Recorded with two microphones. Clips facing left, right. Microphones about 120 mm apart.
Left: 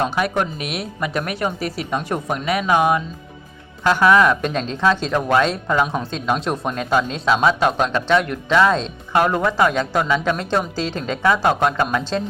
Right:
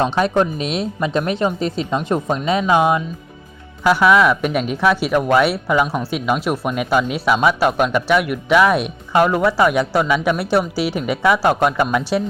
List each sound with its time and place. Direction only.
0.0 s speech: 25° right (ahead or behind)
3.8 s speech: 10° right (ahead or behind)